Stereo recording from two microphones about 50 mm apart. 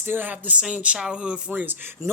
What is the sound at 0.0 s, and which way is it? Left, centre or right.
Speech, right.